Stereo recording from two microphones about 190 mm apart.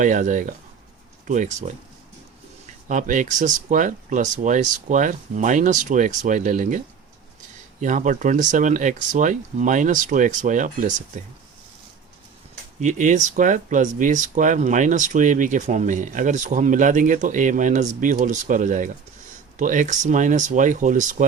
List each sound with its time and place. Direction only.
0.0 s speech: 40° right (ahead or behind)
2.9 s speech: 40° right (ahead or behind)
12.8 s speech: 40° right (ahead or behind)